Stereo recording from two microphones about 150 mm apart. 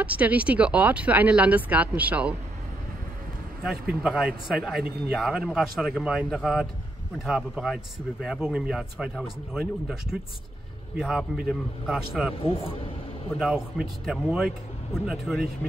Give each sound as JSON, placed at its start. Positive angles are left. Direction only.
{"t": 0.0, "sound": "speech", "side_deg": -10}
{"t": 4.0, "sound": "speech", "side_deg": -5}
{"t": 4.8, "sound": "speech", "side_deg": -90}
{"t": 5.1, "sound": "speech", "side_deg": 0}
{"t": 12.4, "sound": "speech", "side_deg": 35}
{"t": 13.4, "sound": "speech", "side_deg": -5}